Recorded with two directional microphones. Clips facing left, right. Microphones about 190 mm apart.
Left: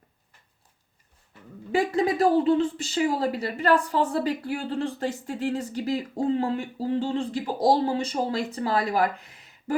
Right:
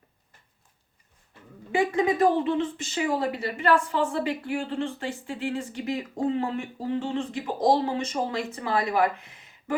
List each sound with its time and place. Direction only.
2.3 s a woman's voice: 35° left (ahead or behind)